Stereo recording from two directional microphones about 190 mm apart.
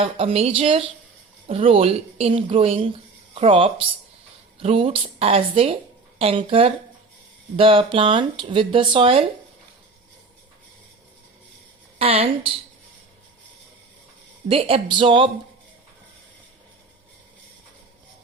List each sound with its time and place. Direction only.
0.0 s a woman's voice: 30° right (ahead or behind)
11.9 s a woman's voice: 30° right (ahead or behind)
14.4 s speech: 30° right (ahead or behind)